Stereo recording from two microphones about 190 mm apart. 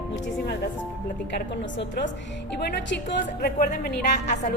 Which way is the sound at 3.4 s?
50° left (ahead or behind).